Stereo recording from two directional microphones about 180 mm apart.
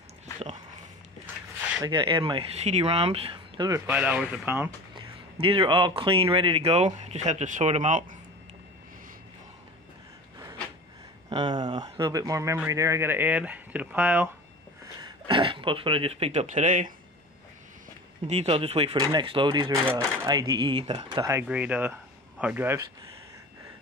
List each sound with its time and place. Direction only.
0.4 s dog: 40° right (ahead or behind)
1.8 s speech: 25° right (ahead or behind); by 4.6 s 10° right (ahead or behind)
4.9 s speech: 30° right (ahead or behind)
11.2 s speech: 25° right (ahead or behind); by 14.3 s 10° right (ahead or behind)
15.0 s speech: 25° right (ahead or behind); by 16.9 s 45° right (ahead or behind)
18.2 s speech: 35° right (ahead or behind)
21.2 s speech: 15° right (ahead or behind)